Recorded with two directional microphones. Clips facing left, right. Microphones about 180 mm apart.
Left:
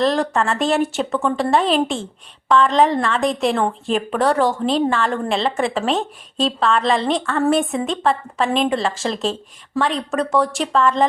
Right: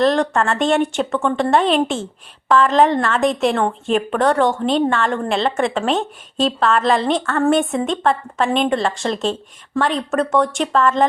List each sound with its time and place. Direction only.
0.0 s a woman's voice: centre (ahead or behind)